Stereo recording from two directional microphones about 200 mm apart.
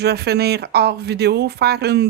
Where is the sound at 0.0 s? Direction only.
55° right (ahead or behind).